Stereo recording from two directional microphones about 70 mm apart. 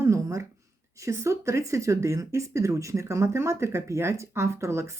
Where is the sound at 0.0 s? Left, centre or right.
Right.